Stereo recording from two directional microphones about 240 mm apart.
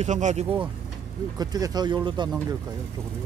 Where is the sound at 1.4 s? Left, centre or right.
Centre.